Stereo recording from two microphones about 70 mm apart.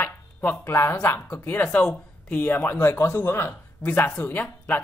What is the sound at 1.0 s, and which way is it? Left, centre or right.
Speech, left.